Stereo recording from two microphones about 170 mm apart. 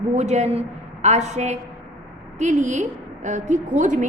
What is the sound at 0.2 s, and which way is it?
A woman's voice, 40° right (ahead or behind).